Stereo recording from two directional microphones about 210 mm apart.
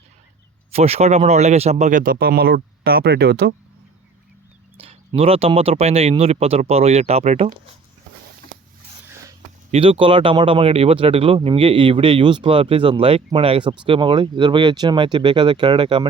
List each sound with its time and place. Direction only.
0.7 s speech: 30° right (ahead or behind); by 3.5 s 50° right (ahead or behind)
4.8 s speech: 25° right (ahead or behind)
9.7 s speech: 25° right (ahead or behind)